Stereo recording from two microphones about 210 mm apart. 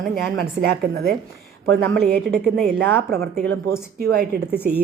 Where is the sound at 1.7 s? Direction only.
50° right (ahead or behind).